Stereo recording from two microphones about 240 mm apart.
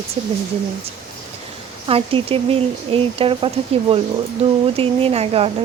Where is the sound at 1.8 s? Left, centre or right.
Right.